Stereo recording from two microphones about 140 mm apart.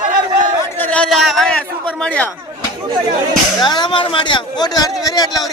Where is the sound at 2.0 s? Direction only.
10° left (ahead or behind).